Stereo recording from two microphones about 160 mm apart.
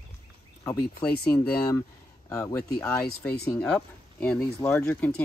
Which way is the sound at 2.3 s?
20° left (ahead or behind).